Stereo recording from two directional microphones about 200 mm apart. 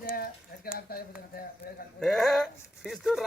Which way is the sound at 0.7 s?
50° left (ahead or behind).